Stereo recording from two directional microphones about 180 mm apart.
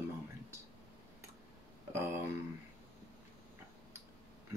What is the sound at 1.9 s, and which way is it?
Speech, 15° right (ahead or behind).